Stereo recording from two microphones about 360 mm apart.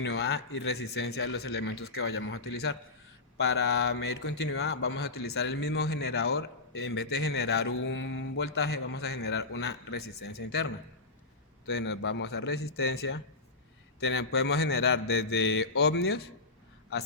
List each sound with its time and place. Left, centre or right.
0.0 s speech: left
11.7 s speech: left